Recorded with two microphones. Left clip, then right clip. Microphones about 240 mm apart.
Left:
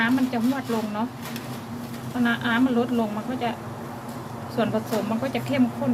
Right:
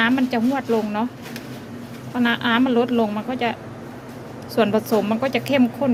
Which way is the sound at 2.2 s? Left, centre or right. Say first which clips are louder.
Right 4 dB; right.